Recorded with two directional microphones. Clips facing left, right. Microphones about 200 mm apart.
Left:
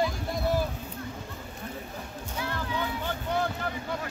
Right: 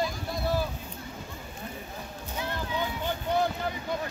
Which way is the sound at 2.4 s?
20° right (ahead or behind).